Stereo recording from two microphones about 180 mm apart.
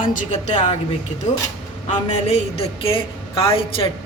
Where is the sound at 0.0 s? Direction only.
45° left (ahead or behind).